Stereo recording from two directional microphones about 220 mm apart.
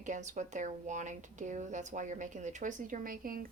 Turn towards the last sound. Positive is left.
turn(degrees=-40)  # may be behind; listen again after turning